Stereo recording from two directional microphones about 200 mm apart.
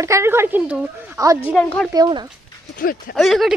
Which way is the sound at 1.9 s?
20° right (ahead or behind).